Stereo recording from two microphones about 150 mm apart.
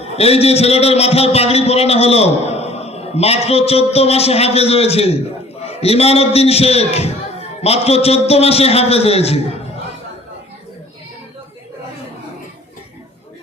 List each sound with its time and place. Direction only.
0.0 s a man's voice: 45° left (ahead or behind)